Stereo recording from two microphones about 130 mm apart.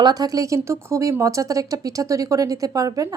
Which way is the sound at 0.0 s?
30° right (ahead or behind).